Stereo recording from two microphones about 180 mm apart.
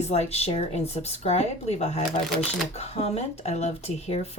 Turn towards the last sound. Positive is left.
turn(degrees=35)  # may be behind; listen again after turning